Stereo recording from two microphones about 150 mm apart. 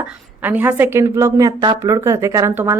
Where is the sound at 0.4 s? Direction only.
10° right (ahead or behind).